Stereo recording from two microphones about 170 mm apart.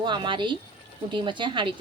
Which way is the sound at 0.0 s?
25° right (ahead or behind).